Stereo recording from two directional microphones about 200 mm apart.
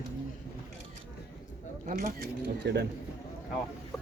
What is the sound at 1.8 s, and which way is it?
Speech, 50° right (ahead or behind).